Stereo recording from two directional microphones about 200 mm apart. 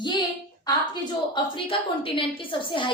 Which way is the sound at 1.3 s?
25° left (ahead or behind).